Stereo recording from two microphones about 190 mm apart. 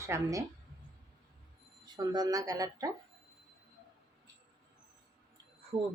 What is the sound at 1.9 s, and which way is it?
Speech, 20° right (ahead or behind).